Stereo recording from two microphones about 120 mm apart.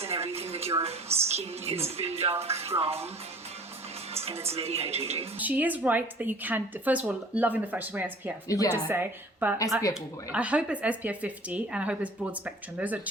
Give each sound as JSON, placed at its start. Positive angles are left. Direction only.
{"t": 0.0, "sound": "a sound", "side_deg": -60}
{"t": 1.3, "sound": "speech", "side_deg": -60}
{"t": 4.1, "sound": "speech", "side_deg": -60}
{"t": 5.4, "sound": "speech", "side_deg": -15}
{"t": 8.4, "sound": "a woman's voice", "side_deg": 30}
{"t": 8.7, "sound": "speech", "side_deg": -20}